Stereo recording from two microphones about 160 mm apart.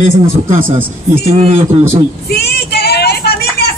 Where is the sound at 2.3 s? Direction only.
85° left.